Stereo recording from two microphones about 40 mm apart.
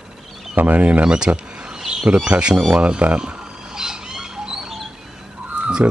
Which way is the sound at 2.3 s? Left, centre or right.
Right.